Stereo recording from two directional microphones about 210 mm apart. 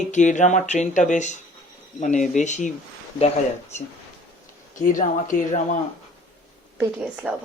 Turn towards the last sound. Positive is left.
turn(degrees=-5)  # may be behind; listen again after turning